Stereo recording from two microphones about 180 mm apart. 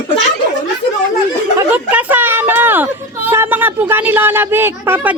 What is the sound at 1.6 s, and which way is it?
Speech, 10° right (ahead or behind).